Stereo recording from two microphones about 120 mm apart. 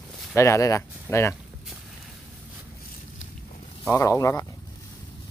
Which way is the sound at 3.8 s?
25° left (ahead or behind).